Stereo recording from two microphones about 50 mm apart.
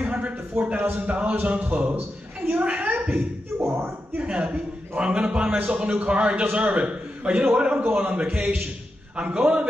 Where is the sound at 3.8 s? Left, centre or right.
Right.